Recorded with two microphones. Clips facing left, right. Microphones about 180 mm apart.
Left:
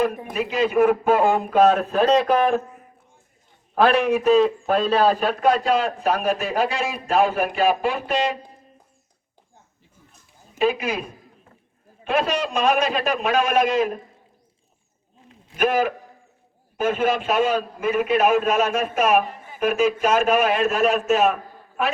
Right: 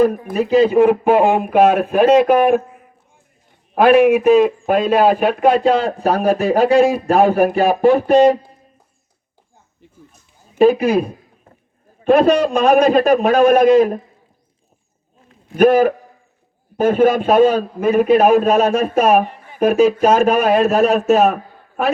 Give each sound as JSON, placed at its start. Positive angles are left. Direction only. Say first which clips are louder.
{"t": 0.3, "sound": "a man's voice", "louder": "right 7 dB", "side_deg": -35}
{"t": 1.0, "sound": "speech", "louder": "right 5 dB", "side_deg": -15}
{"t": 4.3, "sound": "speech", "louder": "right 5 dB", "side_deg": -15}
{"t": 5.2, "sound": "a man's voice", "louder": "right 6 dB", "side_deg": -25}
{"t": 10.6, "sound": "a man's voice", "louder": "right 10 dB", "side_deg": -35}
{"t": 12.3, "sound": "a man's voice", "louder": "right 10 dB", "side_deg": -55}
{"t": 12.5, "sound": "a man's voice", "louder": "right 6 dB", "side_deg": -35}
{"t": 15.5, "sound": "a man's voice", "louder": "right 9 dB", "side_deg": -40}